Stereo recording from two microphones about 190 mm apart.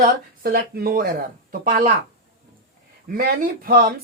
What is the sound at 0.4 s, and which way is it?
Speech, 50° right (ahead or behind).